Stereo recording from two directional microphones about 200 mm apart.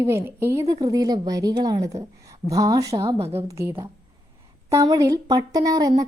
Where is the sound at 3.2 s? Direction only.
30° right (ahead or behind).